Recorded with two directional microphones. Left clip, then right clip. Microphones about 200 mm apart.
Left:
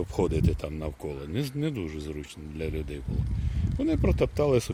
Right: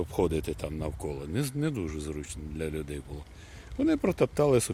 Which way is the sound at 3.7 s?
15° right (ahead or behind).